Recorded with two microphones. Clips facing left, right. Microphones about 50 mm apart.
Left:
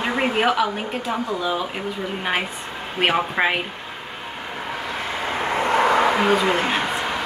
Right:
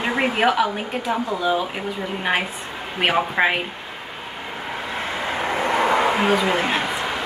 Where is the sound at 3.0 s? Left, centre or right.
Centre.